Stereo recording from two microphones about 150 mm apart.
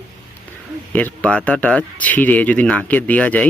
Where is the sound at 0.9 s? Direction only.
10° left (ahead or behind).